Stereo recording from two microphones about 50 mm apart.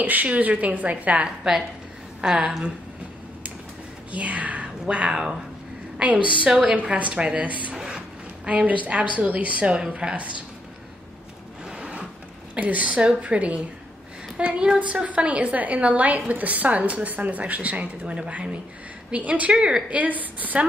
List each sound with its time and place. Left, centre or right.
0.0 s a woman's voice: right
1.2 s a woman's voice: centre
4.1 s speech: right
4.8 s a woman's voice: centre
7.7 s a sound: centre
8.5 s a woman's voice: right
11.7 s a sound: right
12.5 s a woman's voice: right
20.0 s a woman's voice: right